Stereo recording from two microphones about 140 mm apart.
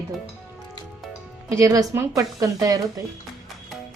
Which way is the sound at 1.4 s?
25° right (ahead or behind).